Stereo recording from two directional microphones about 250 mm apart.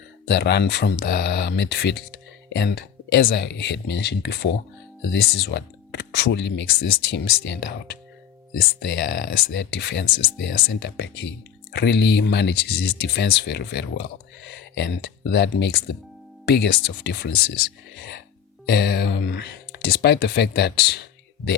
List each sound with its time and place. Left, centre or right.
0.3 s speech: left